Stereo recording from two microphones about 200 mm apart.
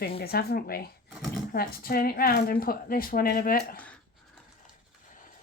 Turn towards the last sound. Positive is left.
turn(degrees=45)  # may be behind; listen again after turning